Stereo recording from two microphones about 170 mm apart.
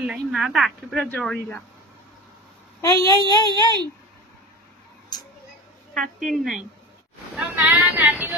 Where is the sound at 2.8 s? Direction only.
20° left (ahead or behind).